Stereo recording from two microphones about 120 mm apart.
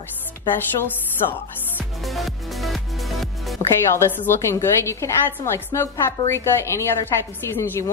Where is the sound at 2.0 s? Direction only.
Centre (ahead or behind).